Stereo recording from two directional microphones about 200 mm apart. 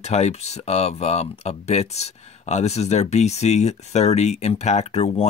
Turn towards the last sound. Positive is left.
turn(degrees=35)  # may be behind; listen again after turning